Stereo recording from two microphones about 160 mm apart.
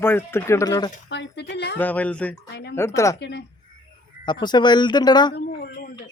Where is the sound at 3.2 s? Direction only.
90° left.